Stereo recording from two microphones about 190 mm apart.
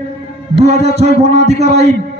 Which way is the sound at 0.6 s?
35° right (ahead or behind).